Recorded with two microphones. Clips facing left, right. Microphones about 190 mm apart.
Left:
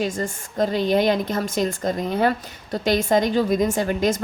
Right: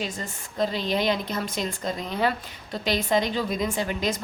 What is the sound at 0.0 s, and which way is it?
Speech, 45° left (ahead or behind).